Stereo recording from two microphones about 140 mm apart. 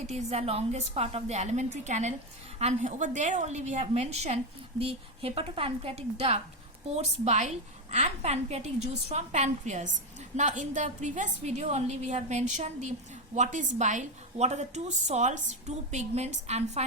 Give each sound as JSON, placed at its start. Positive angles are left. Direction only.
{"t": 0.1, "sound": "a woman's voice", "side_deg": -50}